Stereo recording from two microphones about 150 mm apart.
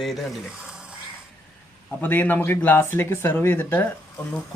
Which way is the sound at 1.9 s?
10° left (ahead or behind).